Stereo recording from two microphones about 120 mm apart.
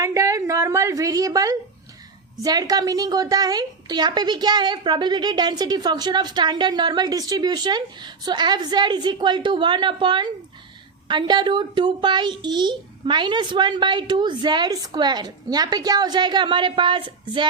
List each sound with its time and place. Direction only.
0.0 s a woman's voice: 25° right (ahead or behind)